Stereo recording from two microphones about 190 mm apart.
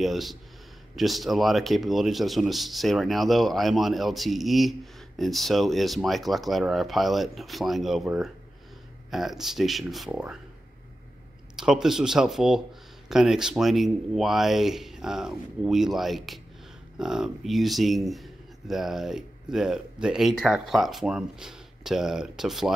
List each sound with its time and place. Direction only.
0.0 s a sound: centre (ahead or behind)
0.9 s speech: centre (ahead or behind)
11.5 s speech: 5° right (ahead or behind)